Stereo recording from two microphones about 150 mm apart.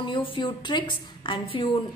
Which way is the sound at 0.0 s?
35° left (ahead or behind).